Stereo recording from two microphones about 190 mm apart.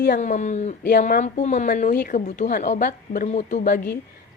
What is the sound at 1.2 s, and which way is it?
Speech, 40° left (ahead or behind).